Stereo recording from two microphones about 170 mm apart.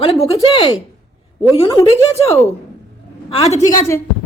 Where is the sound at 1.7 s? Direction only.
15° left (ahead or behind).